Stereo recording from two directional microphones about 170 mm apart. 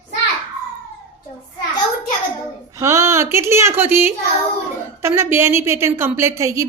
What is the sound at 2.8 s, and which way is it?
A woman's voice, 15° right (ahead or behind).